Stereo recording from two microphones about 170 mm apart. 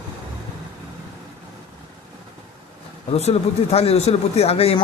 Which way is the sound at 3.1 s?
40° left (ahead or behind).